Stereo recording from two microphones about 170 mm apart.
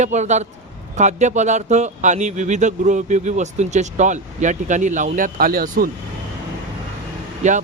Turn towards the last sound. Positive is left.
turn(degrees=-45)  # may be behind; listen again after turning